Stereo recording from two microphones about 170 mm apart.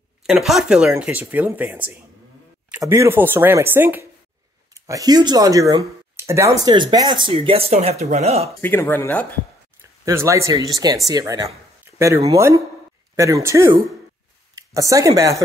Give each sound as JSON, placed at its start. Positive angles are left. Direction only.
{"t": 0.3, "sound": "speech", "side_deg": 0}
{"t": 8.5, "sound": "speech", "side_deg": 10}
{"t": 9.8, "sound": "speech", "side_deg": -15}